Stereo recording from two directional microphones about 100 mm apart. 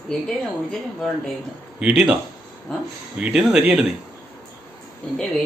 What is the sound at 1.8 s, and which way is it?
Speech, 10° right (ahead or behind).